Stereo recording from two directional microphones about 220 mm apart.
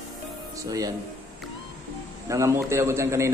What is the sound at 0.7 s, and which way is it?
Speech, 15° right (ahead or behind).